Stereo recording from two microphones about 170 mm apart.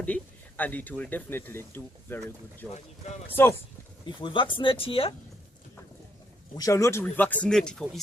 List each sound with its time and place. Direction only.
0.0 s speech: 10° left (ahead or behind)
2.7 s speech: 40° left (ahead or behind)
4.2 s speech: 30° left (ahead or behind)
6.6 s speech: 20° left (ahead or behind); by 8.0 s 5° left (ahead or behind)